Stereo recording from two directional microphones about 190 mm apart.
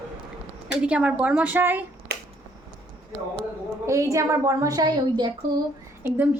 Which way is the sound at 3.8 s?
15° right (ahead or behind).